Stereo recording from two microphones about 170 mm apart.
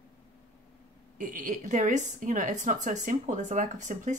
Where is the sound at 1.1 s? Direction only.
50° right (ahead or behind).